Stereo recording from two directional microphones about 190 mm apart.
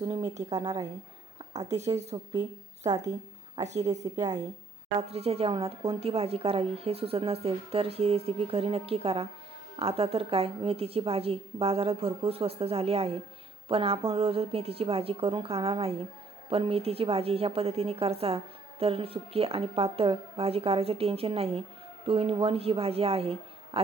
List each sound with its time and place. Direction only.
0.0 s a woman's voice: 20° right (ahead or behind)
1.6 s a woman's voice: 35° right (ahead or behind)
2.8 s a woman's voice: 20° right (ahead or behind)
4.9 s a woman's voice: 30° right (ahead or behind)